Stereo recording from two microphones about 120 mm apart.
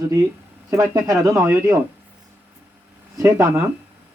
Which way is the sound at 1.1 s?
25° right (ahead or behind).